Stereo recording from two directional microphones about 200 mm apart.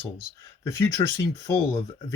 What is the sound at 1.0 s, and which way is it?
Speech, 25° left (ahead or behind).